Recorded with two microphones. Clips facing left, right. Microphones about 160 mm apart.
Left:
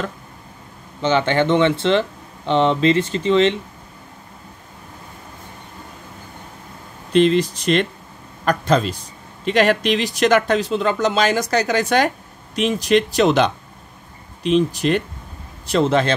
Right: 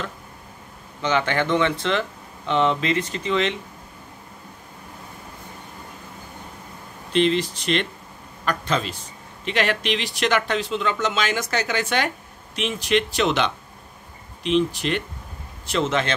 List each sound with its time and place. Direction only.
1.0 s speech: 30° left (ahead or behind)
7.1 s speech: 40° left (ahead or behind)